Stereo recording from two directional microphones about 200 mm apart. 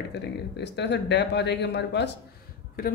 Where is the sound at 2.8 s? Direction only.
45° left (ahead or behind).